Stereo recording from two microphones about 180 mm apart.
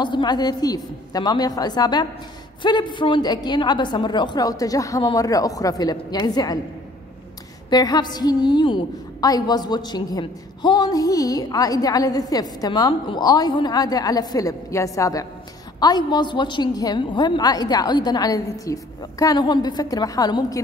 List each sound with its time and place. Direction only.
0.0 s a woman's voice: 25° left (ahead or behind)
7.7 s a woman's voice: 20° left (ahead or behind)